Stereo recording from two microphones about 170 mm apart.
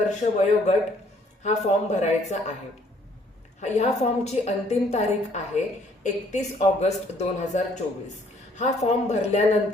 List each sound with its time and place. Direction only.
0.0 s a woman's voice: 45° left (ahead or behind)
3.6 s a woman's voice: 40° left (ahead or behind)